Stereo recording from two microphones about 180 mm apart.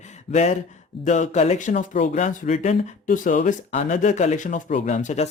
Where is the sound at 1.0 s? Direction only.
40° left (ahead or behind).